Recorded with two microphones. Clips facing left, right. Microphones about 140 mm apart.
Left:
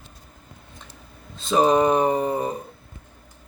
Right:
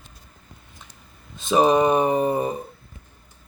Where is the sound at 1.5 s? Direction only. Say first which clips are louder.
Right 1 dB; 20° right (ahead or behind).